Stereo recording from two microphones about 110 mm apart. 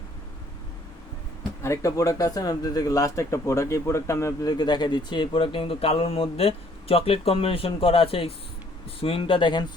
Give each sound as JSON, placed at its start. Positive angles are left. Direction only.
{"t": 1.6, "sound": "speech", "side_deg": 30}
{"t": 4.5, "sound": "speech", "side_deg": 40}